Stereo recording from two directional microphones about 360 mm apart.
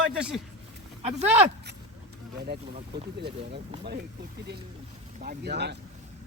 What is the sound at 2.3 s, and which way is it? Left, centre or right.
Speech, right.